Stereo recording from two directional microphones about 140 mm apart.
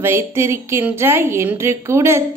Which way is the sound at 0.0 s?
15° right (ahead or behind).